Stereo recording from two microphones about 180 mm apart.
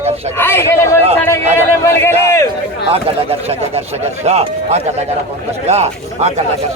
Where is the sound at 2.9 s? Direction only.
35° right (ahead or behind).